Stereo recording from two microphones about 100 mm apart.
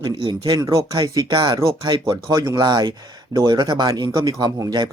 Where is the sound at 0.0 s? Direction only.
45° right (ahead or behind).